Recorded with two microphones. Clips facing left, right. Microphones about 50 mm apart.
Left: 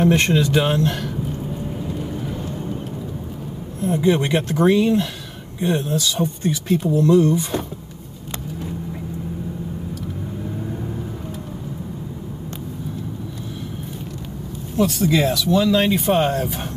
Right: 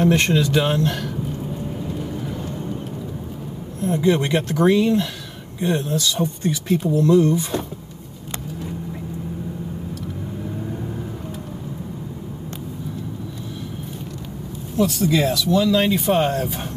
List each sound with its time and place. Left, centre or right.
0.0 s speech: centre
3.8 s speech: centre
14.8 s speech: left
16.2 s speech: centre